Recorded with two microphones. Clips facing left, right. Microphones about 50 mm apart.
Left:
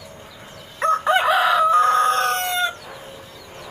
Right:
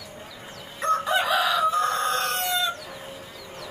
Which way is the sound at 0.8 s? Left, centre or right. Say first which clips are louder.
Left 5 dB; left.